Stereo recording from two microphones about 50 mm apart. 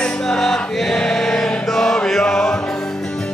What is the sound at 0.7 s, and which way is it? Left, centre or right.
Choir, centre.